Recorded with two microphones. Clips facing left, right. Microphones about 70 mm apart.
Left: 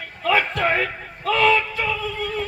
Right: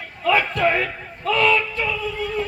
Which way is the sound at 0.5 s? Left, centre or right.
Left.